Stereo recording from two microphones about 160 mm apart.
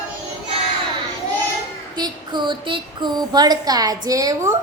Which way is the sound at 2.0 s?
30° right (ahead or behind).